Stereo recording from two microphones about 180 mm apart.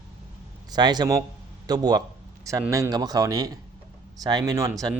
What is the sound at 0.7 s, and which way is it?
Speech, 25° right (ahead or behind).